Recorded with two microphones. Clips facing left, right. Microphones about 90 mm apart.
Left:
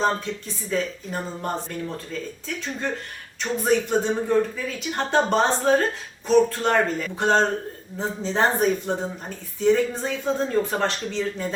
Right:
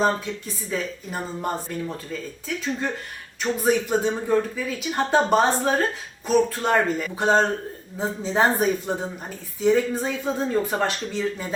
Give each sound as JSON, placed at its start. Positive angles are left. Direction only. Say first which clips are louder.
{"t": 0.0, "sound": "speech", "louder": "right 1 dB", "side_deg": -5}
{"t": 3.4, "sound": "speech", "louder": "even", "side_deg": -5}